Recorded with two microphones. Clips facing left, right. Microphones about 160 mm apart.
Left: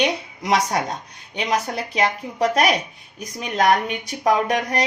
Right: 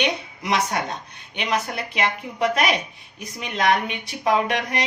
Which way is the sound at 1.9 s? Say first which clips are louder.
Left 4 dB; 35° left (ahead or behind).